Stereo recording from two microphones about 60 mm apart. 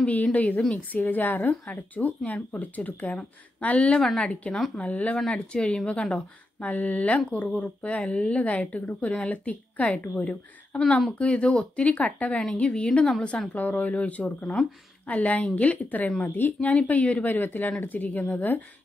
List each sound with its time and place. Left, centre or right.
0.0 s a woman's voice: left
6.6 s a woman's voice: left
13.5 s speech: left